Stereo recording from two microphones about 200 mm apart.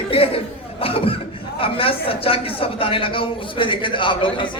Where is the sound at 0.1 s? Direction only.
30° left (ahead or behind).